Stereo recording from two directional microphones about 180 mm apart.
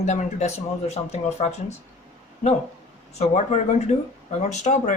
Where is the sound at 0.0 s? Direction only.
40° left (ahead or behind).